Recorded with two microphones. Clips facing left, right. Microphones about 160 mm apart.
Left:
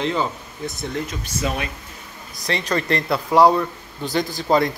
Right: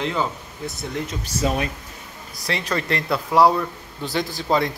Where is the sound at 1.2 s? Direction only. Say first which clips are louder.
Right 2 dB; 35° right (ahead or behind).